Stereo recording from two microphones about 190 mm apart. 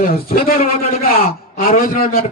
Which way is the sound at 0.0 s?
50° left (ahead or behind).